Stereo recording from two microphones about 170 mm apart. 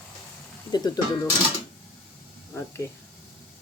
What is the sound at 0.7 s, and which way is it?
Speech, 25° left (ahead or behind).